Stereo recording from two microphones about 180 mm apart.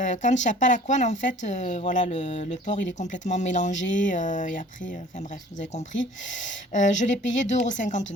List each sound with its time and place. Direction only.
0.0 s speech: 45° left (ahead or behind)